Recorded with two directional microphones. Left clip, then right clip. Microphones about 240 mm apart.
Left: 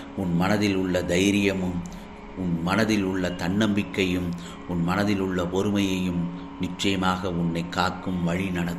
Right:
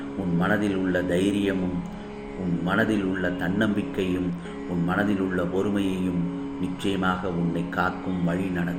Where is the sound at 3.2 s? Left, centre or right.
Left.